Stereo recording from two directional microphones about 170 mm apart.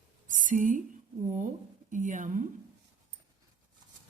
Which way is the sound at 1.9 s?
50° right (ahead or behind).